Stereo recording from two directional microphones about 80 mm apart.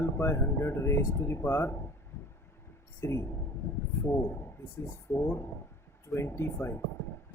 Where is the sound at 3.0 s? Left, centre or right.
Left.